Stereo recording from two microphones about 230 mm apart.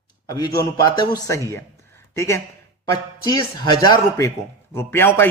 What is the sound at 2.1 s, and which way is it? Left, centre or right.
A man's voice, centre.